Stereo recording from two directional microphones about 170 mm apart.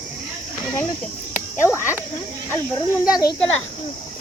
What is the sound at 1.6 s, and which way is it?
Speech, 15° left (ahead or behind).